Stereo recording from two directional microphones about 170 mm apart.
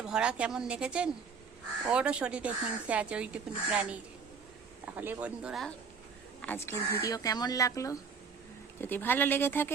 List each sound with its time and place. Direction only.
0.0 s a woman's voice: 5° right (ahead or behind)
6.4 s speech: 10° left (ahead or behind)